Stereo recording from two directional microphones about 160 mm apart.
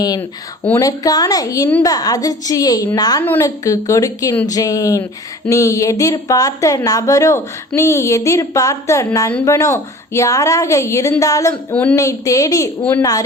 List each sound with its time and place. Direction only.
0.8 s a woman's voice: 20° left (ahead or behind)
11.7 s speech: 10° left (ahead or behind)
11.9 s a woman's voice: 20° left (ahead or behind)